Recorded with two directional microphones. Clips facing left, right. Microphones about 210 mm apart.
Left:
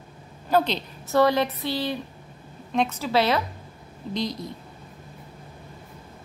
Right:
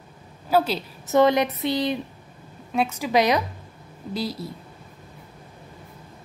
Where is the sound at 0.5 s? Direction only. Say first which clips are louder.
Right 1 dB; 5° right (ahead or behind).